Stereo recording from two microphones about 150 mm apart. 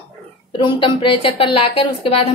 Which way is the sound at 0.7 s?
35° left (ahead or behind).